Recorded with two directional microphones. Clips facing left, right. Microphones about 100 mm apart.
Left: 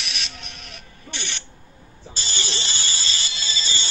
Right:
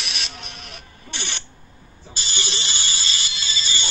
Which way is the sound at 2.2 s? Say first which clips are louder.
Even; 35° left (ahead or behind).